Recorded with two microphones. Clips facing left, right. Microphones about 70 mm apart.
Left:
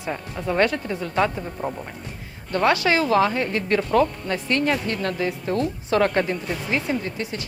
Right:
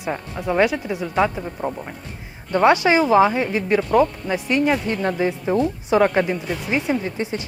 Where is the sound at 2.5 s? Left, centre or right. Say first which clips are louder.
Right 4 dB; right.